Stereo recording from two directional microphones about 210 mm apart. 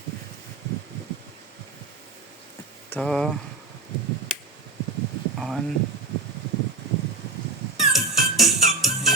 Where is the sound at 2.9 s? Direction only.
Centre (ahead or behind).